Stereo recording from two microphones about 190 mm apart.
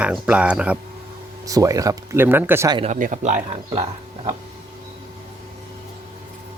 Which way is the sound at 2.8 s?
40° right (ahead or behind).